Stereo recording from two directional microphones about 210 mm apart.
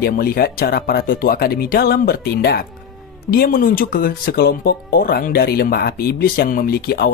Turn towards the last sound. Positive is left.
turn(degrees=45)  # may be behind; listen again after turning